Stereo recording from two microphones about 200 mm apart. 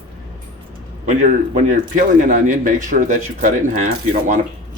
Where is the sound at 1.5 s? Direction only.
40° right (ahead or behind).